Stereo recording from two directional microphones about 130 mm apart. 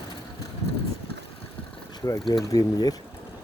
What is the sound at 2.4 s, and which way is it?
Speech, 30° left (ahead or behind).